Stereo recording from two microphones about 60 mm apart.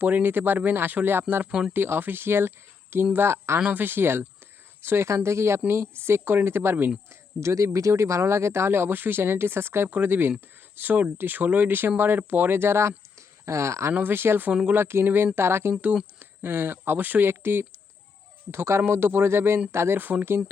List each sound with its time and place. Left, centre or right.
0.0 s speech: right
3.6 s speech: right
7.3 s speech: right
13.1 s a sound: right
13.9 s speech: right
20.0 s speech: right